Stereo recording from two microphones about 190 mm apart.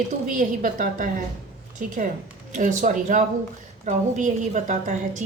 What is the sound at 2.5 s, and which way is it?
A woman's voice, 40° right (ahead or behind).